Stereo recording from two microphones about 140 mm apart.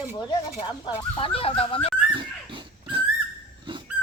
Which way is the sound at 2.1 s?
35° right (ahead or behind).